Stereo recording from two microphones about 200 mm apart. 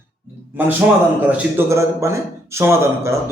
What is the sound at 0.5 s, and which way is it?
A man's voice, 10° right (ahead or behind).